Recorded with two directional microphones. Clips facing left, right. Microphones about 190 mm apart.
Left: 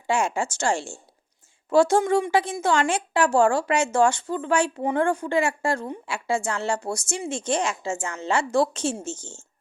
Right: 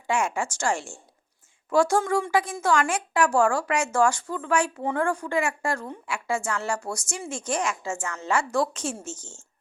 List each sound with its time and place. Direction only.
0.1 s a woman's voice: 30° left (ahead or behind)